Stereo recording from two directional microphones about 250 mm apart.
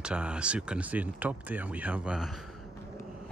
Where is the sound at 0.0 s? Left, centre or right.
Centre.